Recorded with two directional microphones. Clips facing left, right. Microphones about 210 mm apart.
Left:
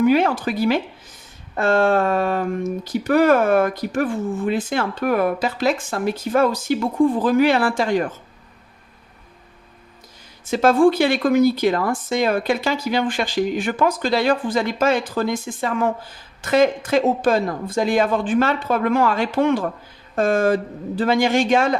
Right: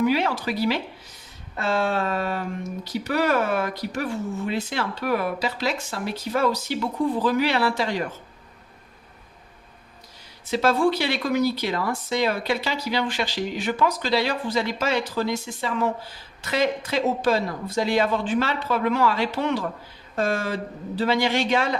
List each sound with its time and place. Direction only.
0.0 s speech: 50° left (ahead or behind)
10.4 s speech: 50° left (ahead or behind)